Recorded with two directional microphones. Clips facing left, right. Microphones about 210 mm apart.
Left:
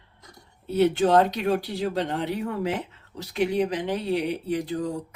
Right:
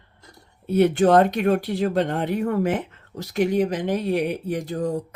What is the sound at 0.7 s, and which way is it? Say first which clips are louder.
Speech: right 3 dB; 55° right (ahead or behind).